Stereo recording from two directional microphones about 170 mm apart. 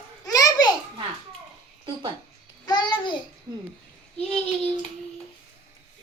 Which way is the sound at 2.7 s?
25° left (ahead or behind).